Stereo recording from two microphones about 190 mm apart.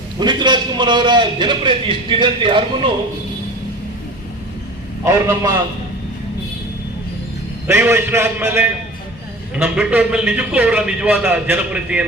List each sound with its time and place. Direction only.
0.2 s a man's voice: 25° right (ahead or behind)
5.0 s a man's voice: 15° right (ahead or behind)
7.7 s a man's voice: 10° right (ahead or behind)